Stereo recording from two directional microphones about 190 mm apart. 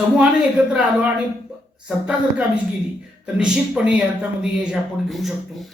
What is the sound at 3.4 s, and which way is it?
Speech, 5° right (ahead or behind).